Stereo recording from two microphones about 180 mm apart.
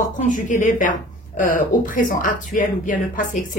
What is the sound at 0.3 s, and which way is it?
Speech, 45° left (ahead or behind).